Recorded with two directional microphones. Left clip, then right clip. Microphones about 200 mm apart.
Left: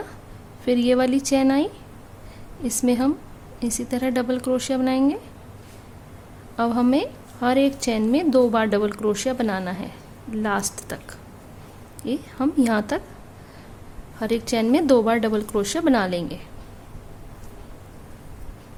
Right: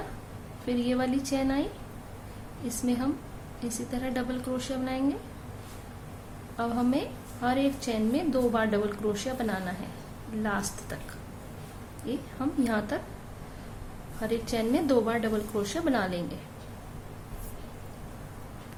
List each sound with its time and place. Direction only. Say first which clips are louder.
0.6 s a woman's voice: left 10 dB; 60° left (ahead or behind)
2.6 s a woman's voice: left 9 dB; 60° left (ahead or behind)
6.6 s a woman's voice: left 8 dB; 60° left (ahead or behind)
12.0 s a woman's voice: left 8 dB; 60° left (ahead or behind)
14.2 s a woman's voice: left 7 dB; 60° left (ahead or behind)